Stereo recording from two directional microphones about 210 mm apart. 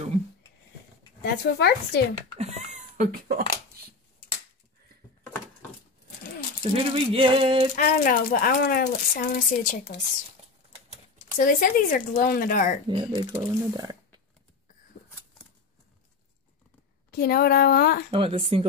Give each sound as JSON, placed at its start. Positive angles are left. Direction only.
{"t": 1.2, "sound": "speech", "side_deg": 50}
{"t": 2.3, "sound": "cat", "side_deg": -30}
{"t": 6.6, "sound": "speech", "side_deg": -25}
{"t": 7.7, "sound": "speech", "side_deg": 40}
{"t": 11.3, "sound": "speech", "side_deg": 40}
{"t": 12.8, "sound": "speech", "side_deg": -20}
{"t": 17.1, "sound": "speech", "side_deg": 45}
{"t": 18.1, "sound": "speech", "side_deg": -25}